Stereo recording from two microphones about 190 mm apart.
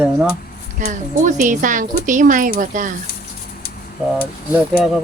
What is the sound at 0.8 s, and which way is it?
A woman's voice, 45° right (ahead or behind).